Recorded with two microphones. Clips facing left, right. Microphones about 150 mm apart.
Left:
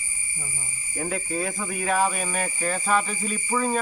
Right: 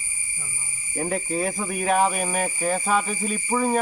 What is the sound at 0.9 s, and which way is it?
Speech, 25° right (ahead or behind).